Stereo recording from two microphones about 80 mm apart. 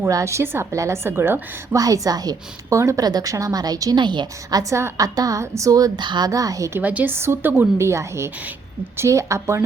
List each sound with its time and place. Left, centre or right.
0.0 s a woman's voice: right
1.7 s a woman's voice: right
2.7 s a woman's voice: right
3.0 s a woman's voice: right
3.9 s a woman's voice: right
4.9 s a woman's voice: right
6.0 s a woman's voice: right
6.7 s a woman's voice: right